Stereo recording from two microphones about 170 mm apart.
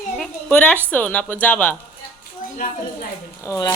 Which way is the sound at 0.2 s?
5° left (ahead or behind).